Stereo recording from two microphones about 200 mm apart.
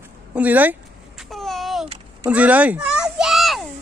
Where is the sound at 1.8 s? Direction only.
30° right (ahead or behind).